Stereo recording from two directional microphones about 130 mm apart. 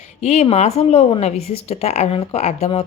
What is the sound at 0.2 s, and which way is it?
A woman's voice, 55° left (ahead or behind).